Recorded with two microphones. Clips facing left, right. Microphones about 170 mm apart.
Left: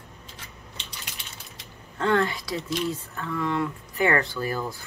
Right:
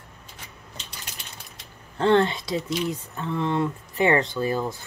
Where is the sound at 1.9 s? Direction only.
30° right (ahead or behind).